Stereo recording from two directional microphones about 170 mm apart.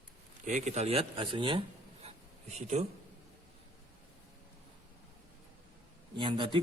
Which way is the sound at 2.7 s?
40° right (ahead or behind).